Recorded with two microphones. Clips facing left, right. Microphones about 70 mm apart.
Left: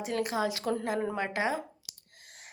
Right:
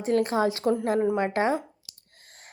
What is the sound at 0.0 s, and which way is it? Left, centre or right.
A woman's voice, right.